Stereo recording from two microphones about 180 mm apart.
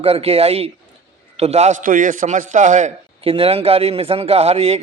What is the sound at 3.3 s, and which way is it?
Speech, 30° right (ahead or behind).